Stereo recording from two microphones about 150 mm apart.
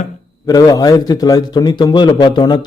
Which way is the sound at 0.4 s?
25° left (ahead or behind).